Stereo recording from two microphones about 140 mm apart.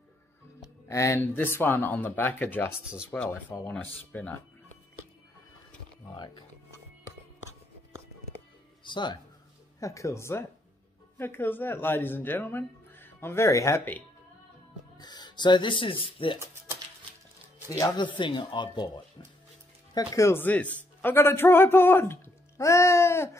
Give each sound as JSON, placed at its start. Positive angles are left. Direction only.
{"t": 0.8, "sound": "a man's voice", "side_deg": 20}
{"t": 6.1, "sound": "speech", "side_deg": 35}
{"t": 8.8, "sound": "speech", "side_deg": 35}
{"t": 9.8, "sound": "a man's voice", "side_deg": 20}
{"t": 15.0, "sound": "speech", "side_deg": 30}
{"t": 17.6, "sound": "speech", "side_deg": 30}
{"t": 19.9, "sound": "a man's voice", "side_deg": 25}